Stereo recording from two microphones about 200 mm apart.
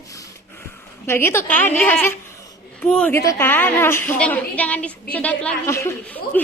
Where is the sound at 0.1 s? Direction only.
15° left (ahead or behind).